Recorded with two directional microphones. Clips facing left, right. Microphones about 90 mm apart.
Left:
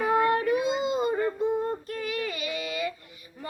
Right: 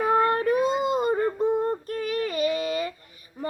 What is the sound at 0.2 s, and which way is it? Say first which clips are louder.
Child singing: right 2 dB; 45° right (ahead or behind).